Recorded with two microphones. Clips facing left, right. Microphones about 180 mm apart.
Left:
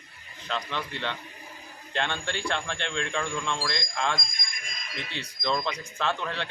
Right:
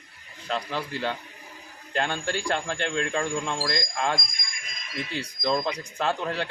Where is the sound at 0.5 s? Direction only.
35° right (ahead or behind).